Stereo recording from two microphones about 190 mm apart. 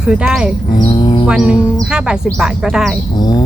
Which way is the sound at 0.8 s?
25° left (ahead or behind).